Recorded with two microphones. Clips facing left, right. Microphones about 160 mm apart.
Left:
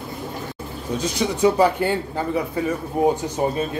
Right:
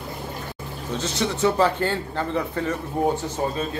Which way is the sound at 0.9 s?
10° left (ahead or behind).